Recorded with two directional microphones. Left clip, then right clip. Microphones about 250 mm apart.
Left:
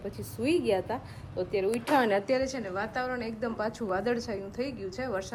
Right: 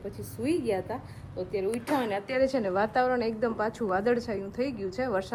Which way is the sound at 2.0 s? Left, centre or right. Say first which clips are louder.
Left 4 dB; left.